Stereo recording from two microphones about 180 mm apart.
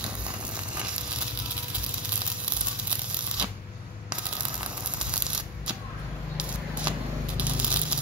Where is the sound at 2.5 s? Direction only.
5° right (ahead or behind).